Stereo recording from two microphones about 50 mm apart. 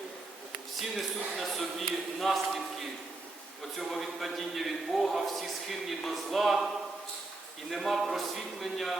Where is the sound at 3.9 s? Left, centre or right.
Centre.